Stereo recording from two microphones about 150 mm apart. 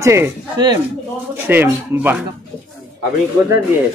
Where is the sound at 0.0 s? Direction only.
20° right (ahead or behind).